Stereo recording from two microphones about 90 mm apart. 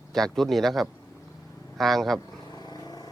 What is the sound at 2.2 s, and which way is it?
Vehicle, 45° left (ahead or behind).